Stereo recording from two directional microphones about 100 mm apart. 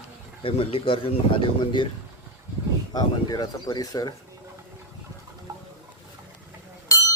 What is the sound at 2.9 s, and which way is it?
Speech, 40° left (ahead or behind).